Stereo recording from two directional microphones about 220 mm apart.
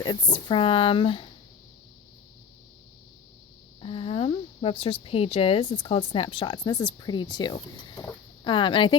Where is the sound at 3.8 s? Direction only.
25° left (ahead or behind).